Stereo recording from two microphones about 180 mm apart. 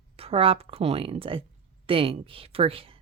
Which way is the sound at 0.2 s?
30° right (ahead or behind).